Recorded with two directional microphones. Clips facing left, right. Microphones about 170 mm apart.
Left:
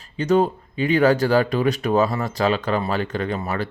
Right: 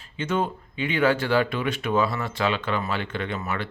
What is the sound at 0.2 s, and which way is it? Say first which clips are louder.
Speech: left 8 dB; 40° left (ahead or behind).